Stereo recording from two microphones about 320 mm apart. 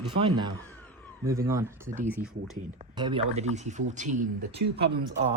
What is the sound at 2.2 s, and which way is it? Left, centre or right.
Speech, centre.